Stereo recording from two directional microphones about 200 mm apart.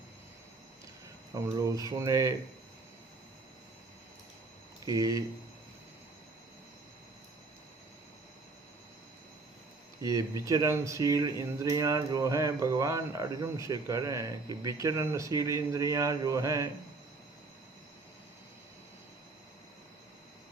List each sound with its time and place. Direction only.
1.3 s speech: 15° right (ahead or behind)
4.9 s speech: 15° right (ahead or behind)
10.0 s speech: 15° right (ahead or behind)